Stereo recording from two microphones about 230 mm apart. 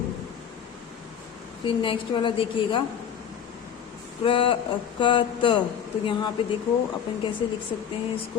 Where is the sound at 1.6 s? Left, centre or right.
Left.